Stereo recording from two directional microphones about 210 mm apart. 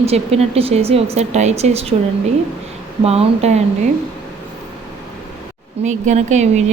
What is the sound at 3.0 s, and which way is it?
Speech, 30° right (ahead or behind).